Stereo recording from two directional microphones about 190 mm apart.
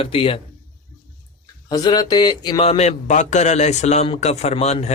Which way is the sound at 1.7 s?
20° left (ahead or behind).